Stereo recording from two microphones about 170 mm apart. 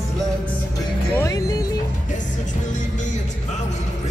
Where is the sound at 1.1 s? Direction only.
20° left (ahead or behind).